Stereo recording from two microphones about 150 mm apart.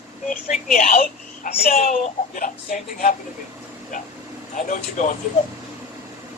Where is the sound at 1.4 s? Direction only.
65° left (ahead or behind).